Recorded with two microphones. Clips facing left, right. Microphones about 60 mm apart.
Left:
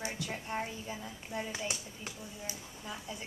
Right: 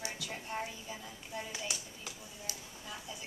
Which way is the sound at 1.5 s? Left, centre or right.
Left.